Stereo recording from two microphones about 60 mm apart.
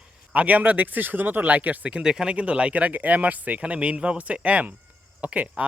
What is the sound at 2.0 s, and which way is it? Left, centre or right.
Speech, centre.